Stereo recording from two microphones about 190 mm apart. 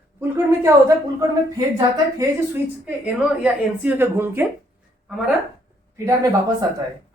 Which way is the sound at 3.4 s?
10° right (ahead or behind).